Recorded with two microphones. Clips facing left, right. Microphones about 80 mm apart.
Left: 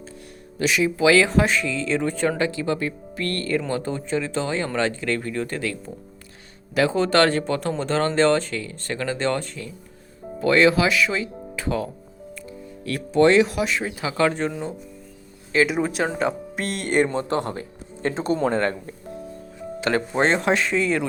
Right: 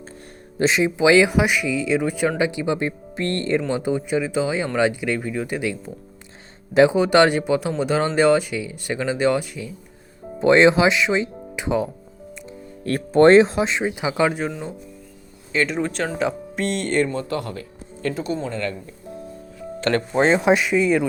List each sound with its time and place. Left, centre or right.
0.6 s speech: right; by 9.7 s centre
10.4 s speech: right
12.8 s speech: right; by 17.1 s centre
17.2 s speech: left
19.8 s speech: centre
20.4 s speech: centre